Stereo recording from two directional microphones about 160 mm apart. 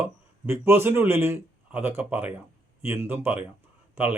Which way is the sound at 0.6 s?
15° right (ahead or behind).